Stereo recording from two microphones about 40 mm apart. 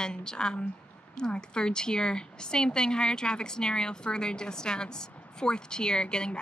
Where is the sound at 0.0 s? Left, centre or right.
Centre.